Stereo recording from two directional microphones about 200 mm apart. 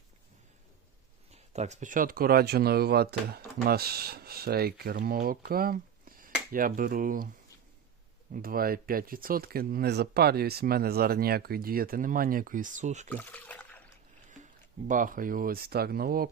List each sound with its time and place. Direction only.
1.3 s speech: 35° right (ahead or behind)
8.3 s speech: 45° right (ahead or behind)
13.1 s a sound: 10° left (ahead or behind)
14.8 s speech: 40° right (ahead or behind)